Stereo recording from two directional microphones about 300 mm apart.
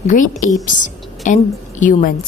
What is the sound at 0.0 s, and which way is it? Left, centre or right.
A woman's voice, left.